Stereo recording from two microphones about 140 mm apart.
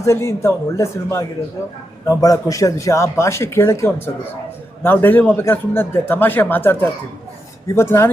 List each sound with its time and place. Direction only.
0.0 s a man's voice: 20° left (ahead or behind)